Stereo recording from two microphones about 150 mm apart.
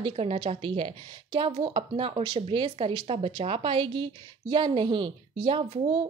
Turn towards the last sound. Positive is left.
turn(degrees=-35)  # may be behind; listen again after turning